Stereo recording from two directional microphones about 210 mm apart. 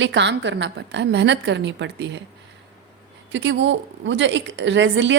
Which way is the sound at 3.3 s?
60° right (ahead or behind).